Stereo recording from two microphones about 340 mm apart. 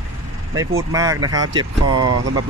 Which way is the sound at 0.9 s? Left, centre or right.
Centre.